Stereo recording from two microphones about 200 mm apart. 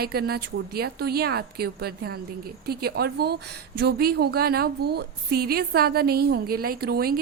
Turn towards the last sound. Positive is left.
turn(degrees=-50)  # may be behind; listen again after turning